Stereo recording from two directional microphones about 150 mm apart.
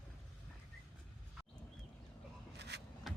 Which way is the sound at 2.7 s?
90° right.